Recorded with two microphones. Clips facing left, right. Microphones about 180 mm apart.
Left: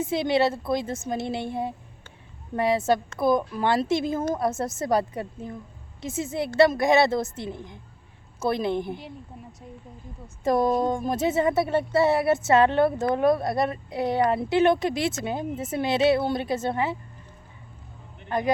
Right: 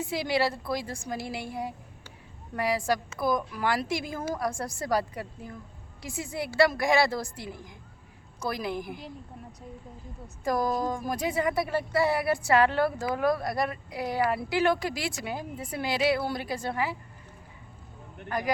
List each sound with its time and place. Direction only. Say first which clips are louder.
0.0 s a woman's voice: left 5 dB; 20° left (ahead or behind)
9.0 s a woman's voice: left 2 dB; centre (ahead or behind)
10.4 s a woman's voice: left 5 dB; 25° left (ahead or behind)
18.3 s a man's voice: left 5 dB; 25° left (ahead or behind)